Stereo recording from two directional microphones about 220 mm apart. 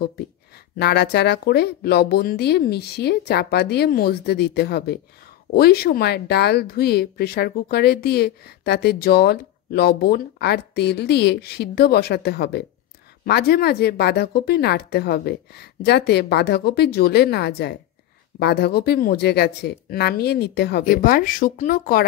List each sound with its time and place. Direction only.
0.7 s speech: 50° left (ahead or behind)